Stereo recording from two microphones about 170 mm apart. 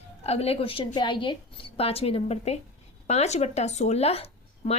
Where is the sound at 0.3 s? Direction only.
35° left (ahead or behind).